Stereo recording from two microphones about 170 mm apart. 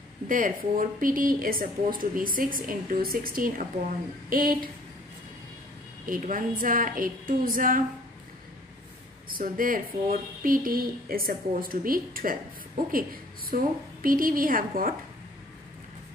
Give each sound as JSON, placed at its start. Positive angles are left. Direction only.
{"t": 0.3, "sound": "a woman's voice", "side_deg": -55}
{"t": 6.0, "sound": "a woman's voice", "side_deg": -55}
{"t": 9.3, "sound": "a woman's voice", "side_deg": -55}